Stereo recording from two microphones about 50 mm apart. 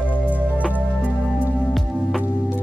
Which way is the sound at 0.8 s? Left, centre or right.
Left.